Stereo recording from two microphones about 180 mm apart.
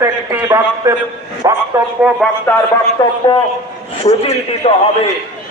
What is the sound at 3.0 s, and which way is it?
Speech, 25° left (ahead or behind).